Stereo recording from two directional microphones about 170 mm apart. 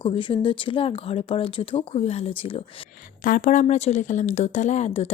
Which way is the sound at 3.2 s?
50° left (ahead or behind).